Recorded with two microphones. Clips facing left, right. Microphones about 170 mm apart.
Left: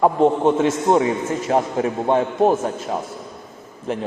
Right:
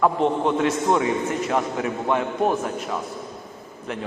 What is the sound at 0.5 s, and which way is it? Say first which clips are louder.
A man's voice: left 3 dB; 30° left (ahead or behind).